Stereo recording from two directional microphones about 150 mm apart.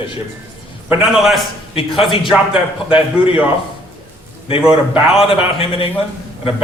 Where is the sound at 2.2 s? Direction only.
Centre (ahead or behind).